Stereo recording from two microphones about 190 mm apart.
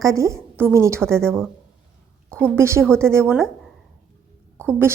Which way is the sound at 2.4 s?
15° right (ahead or behind).